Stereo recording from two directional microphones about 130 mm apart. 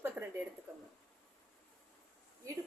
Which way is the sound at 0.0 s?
15° right (ahead or behind).